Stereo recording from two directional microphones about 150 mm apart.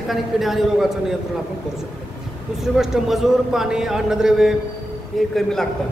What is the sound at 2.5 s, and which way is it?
A man's voice, 5° right (ahead or behind).